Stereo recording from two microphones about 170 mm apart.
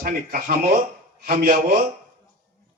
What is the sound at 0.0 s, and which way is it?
Speech, 60° right (ahead or behind).